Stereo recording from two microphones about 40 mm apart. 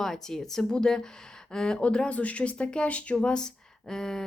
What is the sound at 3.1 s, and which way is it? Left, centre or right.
Speech, left.